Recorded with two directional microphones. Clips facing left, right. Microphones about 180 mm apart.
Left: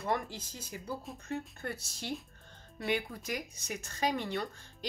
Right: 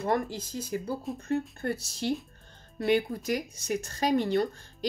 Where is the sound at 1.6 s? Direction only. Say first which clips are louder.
Right 8 dB; 35° right (ahead or behind).